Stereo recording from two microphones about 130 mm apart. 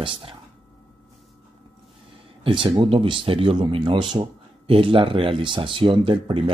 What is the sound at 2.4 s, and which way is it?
Speech, 40° right (ahead or behind).